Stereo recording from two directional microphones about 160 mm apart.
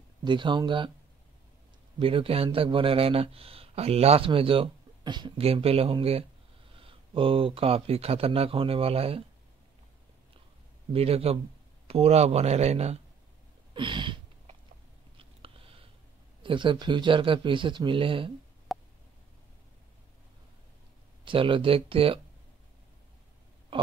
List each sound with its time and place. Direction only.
0.2 s speech: 30° right (ahead or behind)
2.0 s a man's voice: 35° right (ahead or behind)
10.9 s a man's voice: 40° right (ahead or behind)
13.7 s a sound: 30° right (ahead or behind)
15.1 s biting: 35° right (ahead or behind)
16.4 s a man's voice: 30° right (ahead or behind)
18.7 s a sound: centre (ahead or behind)
21.2 s a man's voice: 30° right (ahead or behind)
23.7 s oink: 35° right (ahead or behind)